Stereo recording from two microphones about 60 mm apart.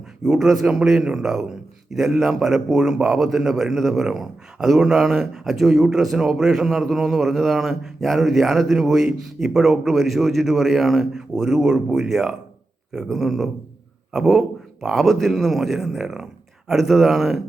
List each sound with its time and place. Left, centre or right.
0.3 s a man's voice: centre
0.6 s a man's voice: centre